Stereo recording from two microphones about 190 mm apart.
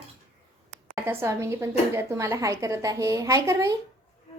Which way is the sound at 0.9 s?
15° right (ahead or behind).